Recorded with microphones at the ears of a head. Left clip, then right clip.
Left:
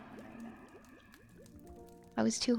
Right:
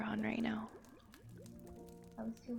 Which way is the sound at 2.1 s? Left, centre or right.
Left.